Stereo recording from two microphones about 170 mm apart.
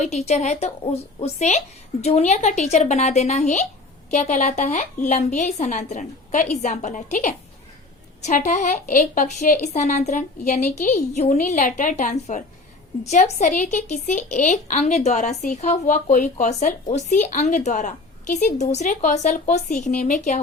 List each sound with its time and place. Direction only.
0.0 s a woman's voice: 40° left (ahead or behind)